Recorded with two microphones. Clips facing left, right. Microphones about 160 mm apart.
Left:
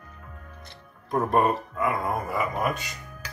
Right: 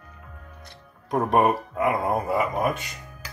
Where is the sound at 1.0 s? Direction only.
75° right (ahead or behind).